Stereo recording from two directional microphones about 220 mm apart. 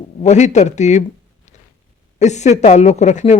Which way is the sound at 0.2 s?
30° left (ahead or behind).